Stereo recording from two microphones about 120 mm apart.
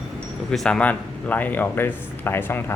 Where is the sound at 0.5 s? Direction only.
5° left (ahead or behind).